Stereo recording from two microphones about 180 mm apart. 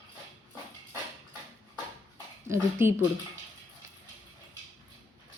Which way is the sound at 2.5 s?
15° right (ahead or behind).